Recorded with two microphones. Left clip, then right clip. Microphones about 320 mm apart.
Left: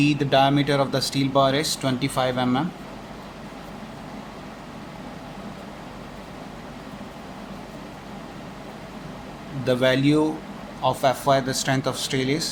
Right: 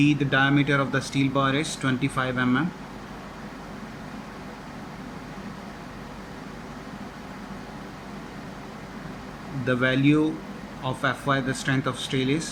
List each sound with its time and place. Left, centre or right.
0.0 s speech: centre
9.6 s speech: centre